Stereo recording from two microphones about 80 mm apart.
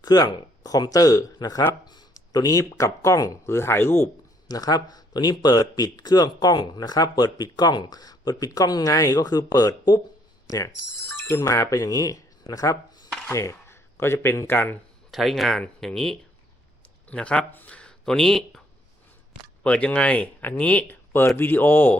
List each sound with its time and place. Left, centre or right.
0.0 s speech: left
4.4 s speech: left
10.4 s mechanisms: left
11.3 s speech: left
13.3 s speech: left
15.1 s speech: centre
19.6 s speech: centre